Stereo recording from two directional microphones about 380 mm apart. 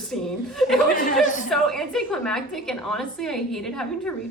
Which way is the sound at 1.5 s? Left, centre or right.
Centre.